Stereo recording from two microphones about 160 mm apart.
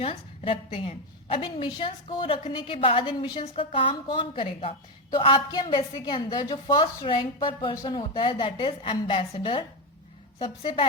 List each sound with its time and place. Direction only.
0.0 s a woman's voice: 35° left (ahead or behind)